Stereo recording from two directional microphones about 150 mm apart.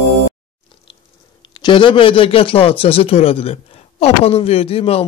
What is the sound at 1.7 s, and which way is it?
Speech, 35° left (ahead or behind).